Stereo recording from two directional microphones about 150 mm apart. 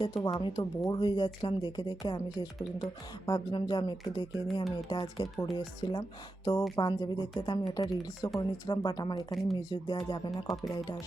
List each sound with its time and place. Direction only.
0.0 s speech: 30° left (ahead or behind)
10.5 s speech: centre (ahead or behind)